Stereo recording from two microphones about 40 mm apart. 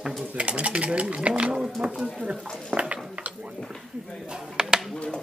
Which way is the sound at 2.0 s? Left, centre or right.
Centre.